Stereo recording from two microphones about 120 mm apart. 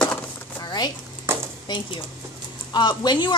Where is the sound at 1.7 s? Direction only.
40° left (ahead or behind).